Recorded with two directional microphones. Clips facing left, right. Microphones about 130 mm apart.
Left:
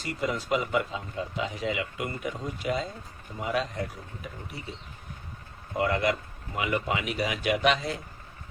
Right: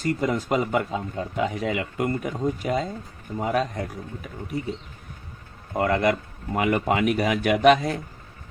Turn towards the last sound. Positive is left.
turn(degrees=-50)  # may be behind; listen again after turning